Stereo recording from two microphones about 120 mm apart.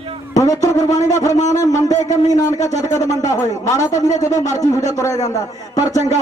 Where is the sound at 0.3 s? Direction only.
30° left (ahead or behind).